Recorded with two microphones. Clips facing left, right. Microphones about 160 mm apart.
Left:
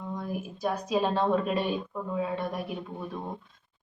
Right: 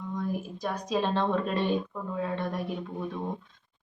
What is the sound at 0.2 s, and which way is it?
A woman's voice, 5° left (ahead or behind).